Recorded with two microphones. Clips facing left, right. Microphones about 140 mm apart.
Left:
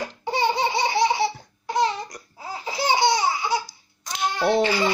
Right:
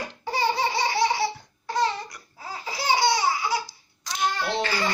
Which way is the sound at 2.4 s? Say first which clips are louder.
Left 4 dB; 20° left (ahead or behind).